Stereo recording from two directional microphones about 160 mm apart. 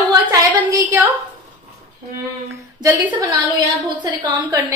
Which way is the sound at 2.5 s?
20° right (ahead or behind).